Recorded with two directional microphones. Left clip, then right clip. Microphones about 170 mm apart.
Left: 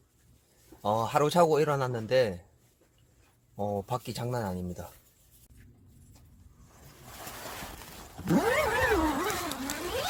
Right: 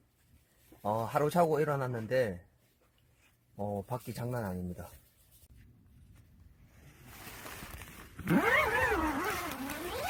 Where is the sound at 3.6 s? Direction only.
5° left (ahead or behind).